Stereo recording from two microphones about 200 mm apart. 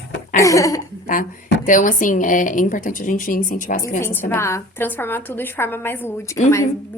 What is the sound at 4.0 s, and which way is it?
A woman's voice, 10° left (ahead or behind).